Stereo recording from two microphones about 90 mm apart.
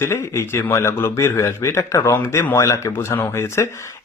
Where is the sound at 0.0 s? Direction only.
30° left (ahead or behind).